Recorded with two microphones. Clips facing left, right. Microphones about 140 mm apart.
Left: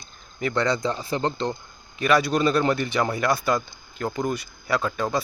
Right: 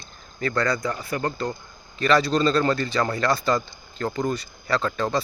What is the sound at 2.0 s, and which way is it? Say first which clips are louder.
Speech: right 1 dB; 10° left (ahead or behind).